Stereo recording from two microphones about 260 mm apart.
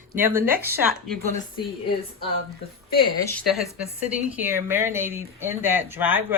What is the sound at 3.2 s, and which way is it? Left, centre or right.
Speech, centre.